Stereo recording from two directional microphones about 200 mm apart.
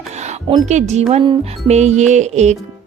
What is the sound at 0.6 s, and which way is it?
A woman's voice, 35° right (ahead or behind).